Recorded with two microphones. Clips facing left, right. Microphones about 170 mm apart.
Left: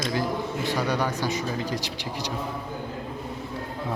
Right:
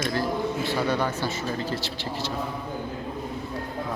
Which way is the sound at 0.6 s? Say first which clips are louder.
Left 2 dB; 15° left (ahead or behind).